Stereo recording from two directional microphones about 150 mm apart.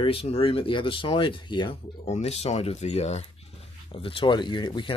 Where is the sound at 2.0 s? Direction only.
45° left (ahead or behind).